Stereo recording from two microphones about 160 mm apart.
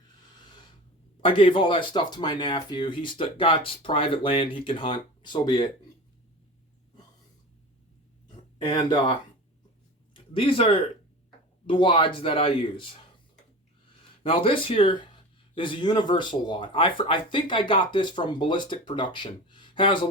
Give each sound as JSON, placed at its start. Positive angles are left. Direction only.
{"t": 1.2, "sound": "speech", "side_deg": 35}
{"t": 8.6, "sound": "speech", "side_deg": 30}
{"t": 10.3, "sound": "speech", "side_deg": 35}
{"t": 14.3, "sound": "speech", "side_deg": 35}